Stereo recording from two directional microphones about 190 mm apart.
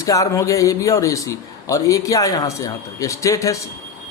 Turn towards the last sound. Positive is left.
turn(degrees=15)  # may be behind; listen again after turning